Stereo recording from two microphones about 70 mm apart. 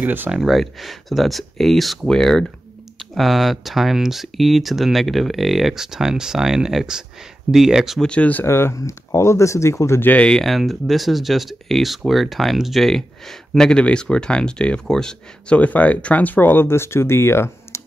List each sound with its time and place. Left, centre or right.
0.0 s speech: right
0.3 s speech: centre
8.0 s speech: centre
8.5 s speech: left
10.2 s speech: centre; by 17.8 s left